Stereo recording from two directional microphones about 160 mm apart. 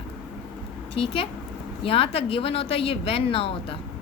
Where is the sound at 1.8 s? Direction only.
35° left (ahead or behind).